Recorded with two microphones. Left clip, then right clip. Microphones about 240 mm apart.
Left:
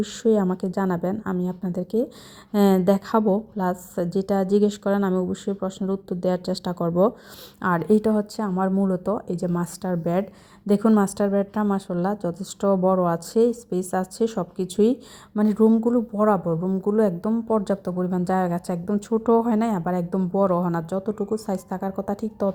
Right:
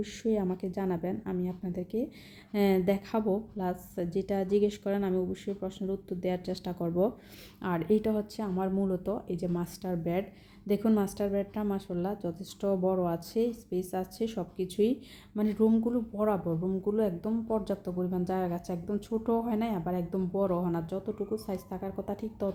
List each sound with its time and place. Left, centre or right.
0.0 s speech: left